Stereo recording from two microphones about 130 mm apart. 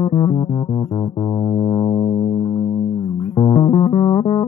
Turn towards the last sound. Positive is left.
turn(degrees=45)  # may be behind; listen again after turning